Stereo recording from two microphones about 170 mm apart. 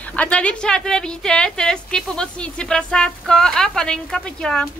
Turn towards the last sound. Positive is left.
turn(degrees=5)  # may be behind; listen again after turning